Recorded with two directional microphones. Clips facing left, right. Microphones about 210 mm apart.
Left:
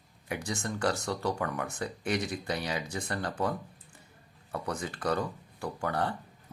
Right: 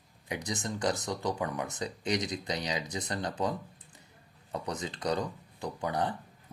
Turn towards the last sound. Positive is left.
turn(degrees=-15)  # may be behind; listen again after turning